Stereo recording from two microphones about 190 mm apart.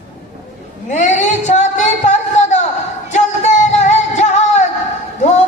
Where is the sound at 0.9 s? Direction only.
40° left (ahead or behind).